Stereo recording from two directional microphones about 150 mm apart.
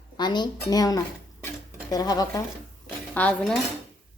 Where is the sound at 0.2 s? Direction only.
30° left (ahead or behind).